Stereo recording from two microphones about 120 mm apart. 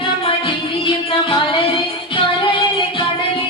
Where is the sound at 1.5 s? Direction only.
50° left (ahead or behind).